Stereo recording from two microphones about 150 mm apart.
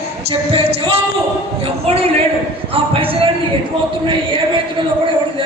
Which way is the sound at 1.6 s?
40° right (ahead or behind).